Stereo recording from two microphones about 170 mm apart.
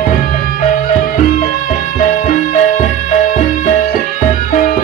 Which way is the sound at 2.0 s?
50° left (ahead or behind).